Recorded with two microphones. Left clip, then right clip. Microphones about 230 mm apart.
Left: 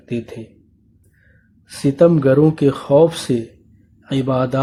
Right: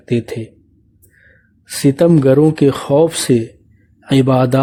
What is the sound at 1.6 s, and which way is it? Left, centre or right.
A man's voice, right.